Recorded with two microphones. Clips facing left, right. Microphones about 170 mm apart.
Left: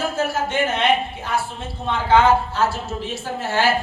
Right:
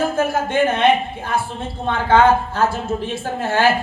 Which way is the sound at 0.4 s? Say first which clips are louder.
Right 5 dB; 55° right (ahead or behind).